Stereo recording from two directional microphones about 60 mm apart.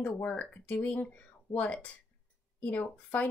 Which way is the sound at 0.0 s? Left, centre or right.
Left.